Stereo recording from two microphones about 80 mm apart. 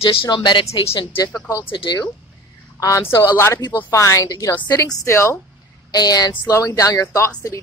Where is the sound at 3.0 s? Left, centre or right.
Left.